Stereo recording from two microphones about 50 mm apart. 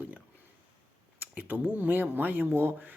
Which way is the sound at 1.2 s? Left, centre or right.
Right.